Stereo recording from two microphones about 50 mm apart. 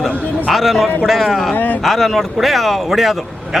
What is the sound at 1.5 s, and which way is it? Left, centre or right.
Speech, left.